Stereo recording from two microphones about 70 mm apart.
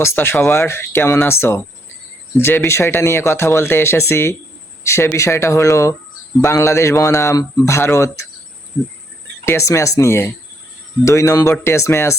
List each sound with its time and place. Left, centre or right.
0.0 s speech: left
2.6 s speech: left
7.3 s speech: left
7.7 s speech: left
9.5 s speech: left